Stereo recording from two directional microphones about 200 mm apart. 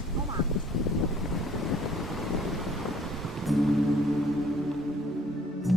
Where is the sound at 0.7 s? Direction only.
Centre (ahead or behind).